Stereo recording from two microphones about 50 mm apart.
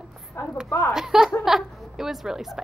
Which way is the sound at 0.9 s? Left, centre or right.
Centre.